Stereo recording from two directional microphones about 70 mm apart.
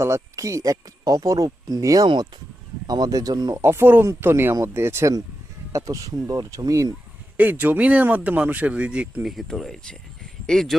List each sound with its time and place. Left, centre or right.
0.0 s speech: right
2.8 s speech: right
3.5 s speech: right
5.7 s speech: right
7.3 s speech: right
9.2 s speech: centre